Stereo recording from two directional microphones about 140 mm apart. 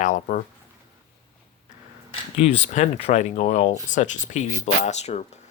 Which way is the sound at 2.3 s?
50° left (ahead or behind).